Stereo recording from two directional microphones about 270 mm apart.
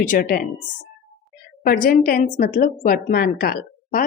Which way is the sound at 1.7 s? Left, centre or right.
Left.